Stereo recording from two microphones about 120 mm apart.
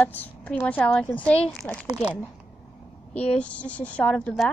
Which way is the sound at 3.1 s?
10° left (ahead or behind).